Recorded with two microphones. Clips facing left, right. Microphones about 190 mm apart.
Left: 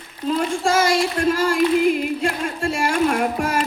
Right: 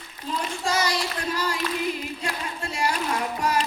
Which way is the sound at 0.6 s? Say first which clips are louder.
Left 7 dB; 50° left (ahead or behind).